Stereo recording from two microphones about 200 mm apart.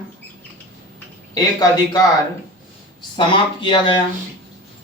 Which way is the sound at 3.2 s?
25° left (ahead or behind).